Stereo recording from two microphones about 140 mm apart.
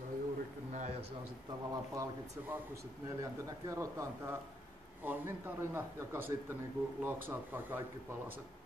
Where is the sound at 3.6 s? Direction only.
20° right (ahead or behind).